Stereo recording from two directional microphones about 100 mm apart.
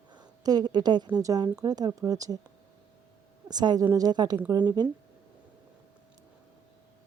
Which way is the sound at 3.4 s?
45° right (ahead or behind).